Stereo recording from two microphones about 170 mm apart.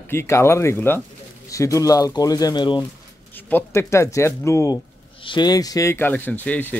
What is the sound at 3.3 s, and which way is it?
Speech, 15° left (ahead or behind).